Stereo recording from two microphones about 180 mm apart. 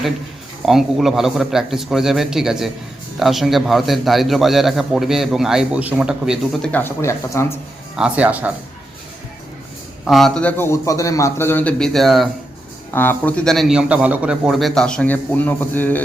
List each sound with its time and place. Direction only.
0.6 s a man's voice: centre (ahead or behind); by 7.4 s 15° left (ahead or behind)
7.9 s speech: 5° right (ahead or behind)
10.1 s a man's voice: centre (ahead or behind)
12.9 s a man's voice: 10° left (ahead or behind)